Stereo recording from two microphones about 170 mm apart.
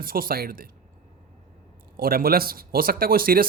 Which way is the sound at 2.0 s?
60° right (ahead or behind).